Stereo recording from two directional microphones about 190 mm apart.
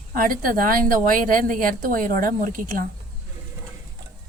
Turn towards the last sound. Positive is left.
turn(degrees=-45)  # may be behind; listen again after turning